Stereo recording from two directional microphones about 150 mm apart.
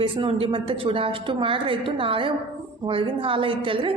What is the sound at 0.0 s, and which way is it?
A woman's voice, 35° right (ahead or behind).